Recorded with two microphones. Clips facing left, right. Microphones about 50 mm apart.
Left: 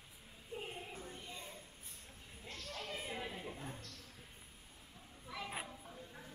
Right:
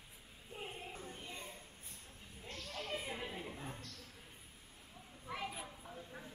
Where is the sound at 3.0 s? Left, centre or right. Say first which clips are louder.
Even; centre.